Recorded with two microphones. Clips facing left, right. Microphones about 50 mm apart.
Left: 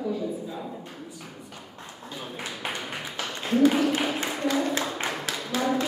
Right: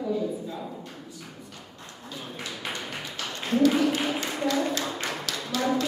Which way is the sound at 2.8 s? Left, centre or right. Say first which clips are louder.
Left 1 dB; centre.